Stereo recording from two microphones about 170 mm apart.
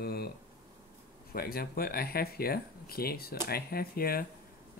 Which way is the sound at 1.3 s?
60° left (ahead or behind).